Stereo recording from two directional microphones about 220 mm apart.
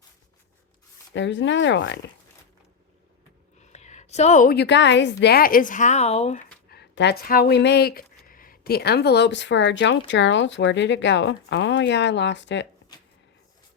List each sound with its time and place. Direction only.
1.1 s speech: 55° left (ahead or behind)
3.6 s a woman's voice: 30° left (ahead or behind); by 5.1 s 55° left (ahead or behind)
5.2 s speech: 45° left (ahead or behind)
6.7 s speech: 50° left (ahead or behind)